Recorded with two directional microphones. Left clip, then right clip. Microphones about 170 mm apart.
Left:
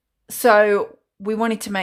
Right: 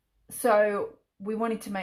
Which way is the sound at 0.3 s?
30° left (ahead or behind).